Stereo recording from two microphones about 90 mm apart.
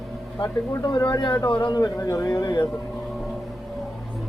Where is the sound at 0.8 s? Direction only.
50° left (ahead or behind).